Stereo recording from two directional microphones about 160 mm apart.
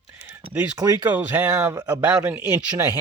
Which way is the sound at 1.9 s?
5° right (ahead or behind).